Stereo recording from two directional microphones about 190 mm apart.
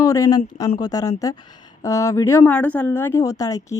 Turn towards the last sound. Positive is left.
turn(degrees=15)  # may be behind; listen again after turning